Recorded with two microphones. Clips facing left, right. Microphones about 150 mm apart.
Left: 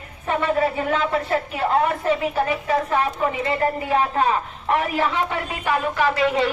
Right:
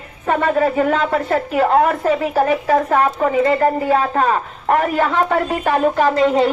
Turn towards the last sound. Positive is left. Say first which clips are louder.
# right 6 dB
turn(degrees=-40)  # may be behind; listen again after turning